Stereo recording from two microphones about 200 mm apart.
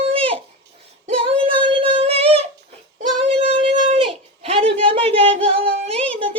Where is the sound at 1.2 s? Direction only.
25° right (ahead or behind).